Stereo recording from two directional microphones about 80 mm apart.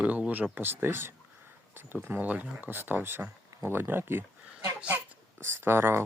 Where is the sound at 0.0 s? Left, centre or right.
Centre.